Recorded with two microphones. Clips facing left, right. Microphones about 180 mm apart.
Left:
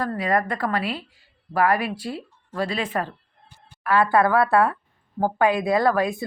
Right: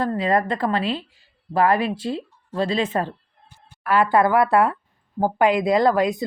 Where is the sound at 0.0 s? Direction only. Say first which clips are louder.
Right 3 dB; 25° right (ahead or behind).